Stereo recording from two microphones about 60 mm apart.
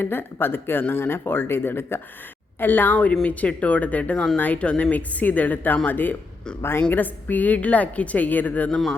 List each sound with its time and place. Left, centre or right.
0.0 s speech: left